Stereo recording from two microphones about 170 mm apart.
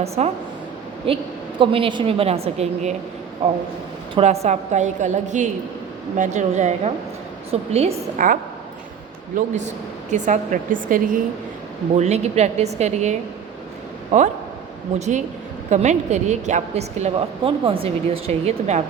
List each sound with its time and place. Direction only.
0.2 s a woman's voice: 40° right (ahead or behind)
11.9 s a woman's voice: 40° right (ahead or behind)
14.9 s a woman's voice: 40° right (ahead or behind)